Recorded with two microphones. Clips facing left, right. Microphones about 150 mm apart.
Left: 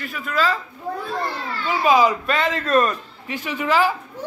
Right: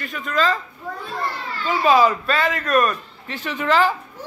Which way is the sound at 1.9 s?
15° left (ahead or behind).